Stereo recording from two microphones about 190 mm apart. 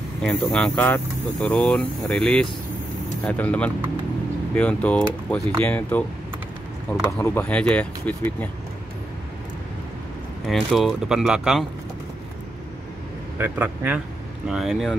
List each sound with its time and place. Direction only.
0.2 s speech: centre (ahead or behind)
7.1 s speech: 15° left (ahead or behind)
10.4 s speech: centre (ahead or behind)
13.4 s speech: 10° right (ahead or behind)